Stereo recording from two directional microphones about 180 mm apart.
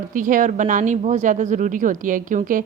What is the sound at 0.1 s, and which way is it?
A woman's voice, 45° right (ahead or behind).